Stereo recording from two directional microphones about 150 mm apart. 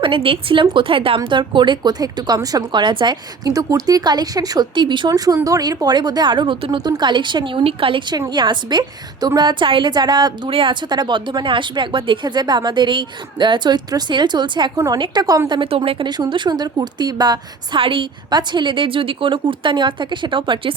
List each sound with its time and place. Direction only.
0.0 s a woman's voice: 35° right (ahead or behind)